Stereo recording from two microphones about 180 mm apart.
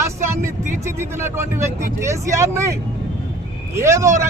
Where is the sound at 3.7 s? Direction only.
15° right (ahead or behind).